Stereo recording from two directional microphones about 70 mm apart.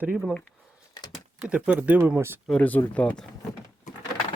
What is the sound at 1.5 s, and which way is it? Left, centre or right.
Speech, centre.